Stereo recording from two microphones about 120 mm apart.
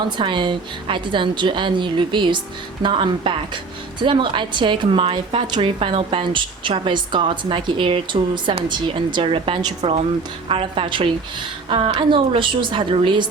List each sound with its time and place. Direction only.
0.2 s a woman's voice: 40° right (ahead or behind)
9.8 s a woman's voice: 55° right (ahead or behind)